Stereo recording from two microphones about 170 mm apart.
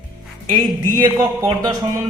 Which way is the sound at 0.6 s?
25° right (ahead or behind).